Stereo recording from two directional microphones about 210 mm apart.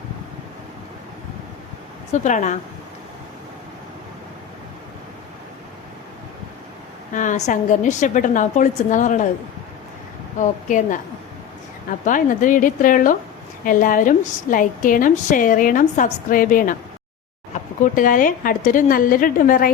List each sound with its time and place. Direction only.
2.1 s a woman's voice: 35° left (ahead or behind)
7.1 s a woman's voice: 35° left (ahead or behind)
10.7 s a woman's voice: 40° left (ahead or behind)
12.0 s a woman's voice: 40° left (ahead or behind)